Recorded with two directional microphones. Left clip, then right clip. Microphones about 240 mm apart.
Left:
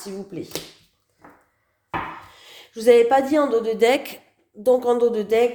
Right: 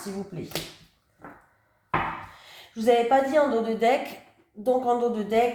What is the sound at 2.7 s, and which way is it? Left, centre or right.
Speech, left.